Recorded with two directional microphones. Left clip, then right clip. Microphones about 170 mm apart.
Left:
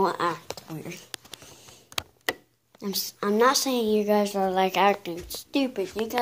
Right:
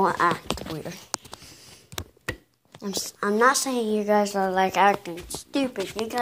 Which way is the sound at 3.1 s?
15° left (ahead or behind).